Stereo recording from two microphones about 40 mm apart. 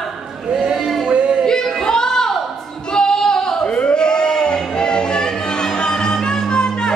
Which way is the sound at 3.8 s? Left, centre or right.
Left.